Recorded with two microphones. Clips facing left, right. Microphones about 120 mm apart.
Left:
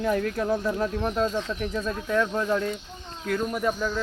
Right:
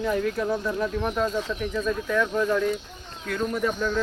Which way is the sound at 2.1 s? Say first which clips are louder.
Even; 35° left (ahead or behind).